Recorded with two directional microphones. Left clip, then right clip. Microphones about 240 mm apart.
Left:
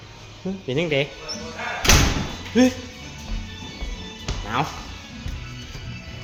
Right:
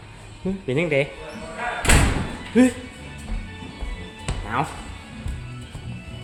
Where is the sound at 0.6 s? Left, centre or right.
Centre.